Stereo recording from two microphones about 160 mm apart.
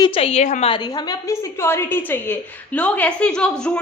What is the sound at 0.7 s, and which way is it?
A woman's voice, 25° left (ahead or behind).